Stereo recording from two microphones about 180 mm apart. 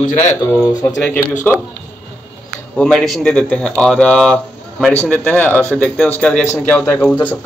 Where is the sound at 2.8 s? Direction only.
Centre (ahead or behind).